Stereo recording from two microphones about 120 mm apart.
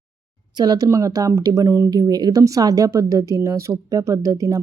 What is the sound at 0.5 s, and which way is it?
Speech, 35° right (ahead or behind).